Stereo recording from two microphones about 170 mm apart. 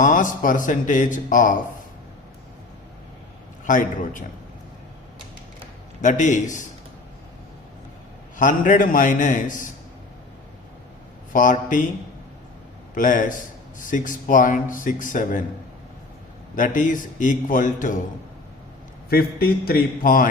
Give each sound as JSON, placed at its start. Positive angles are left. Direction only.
{"t": 0.0, "sound": "a man's voice", "side_deg": 50}
{"t": 3.7, "sound": "a man's voice", "side_deg": 50}
{"t": 6.0, "sound": "a man's voice", "side_deg": 45}
{"t": 8.4, "sound": "a man's voice", "side_deg": 50}
{"t": 11.3, "sound": "a man's voice", "side_deg": 50}
{"t": 12.9, "sound": "a man's voice", "side_deg": 50}
{"t": 16.6, "sound": "a man's voice", "side_deg": 50}
{"t": 19.1, "sound": "speech", "side_deg": 60}